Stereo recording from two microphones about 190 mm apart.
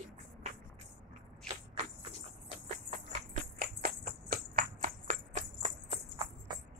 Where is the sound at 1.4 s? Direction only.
35° right (ahead or behind).